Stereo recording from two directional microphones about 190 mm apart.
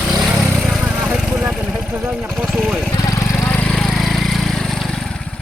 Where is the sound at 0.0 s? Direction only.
5° right (ahead or behind).